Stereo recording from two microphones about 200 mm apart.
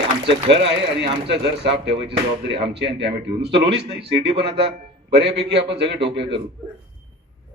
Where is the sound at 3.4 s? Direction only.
60° right (ahead or behind).